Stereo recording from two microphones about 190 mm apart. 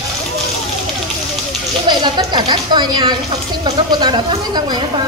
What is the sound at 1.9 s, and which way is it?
Speech, 25° right (ahead or behind).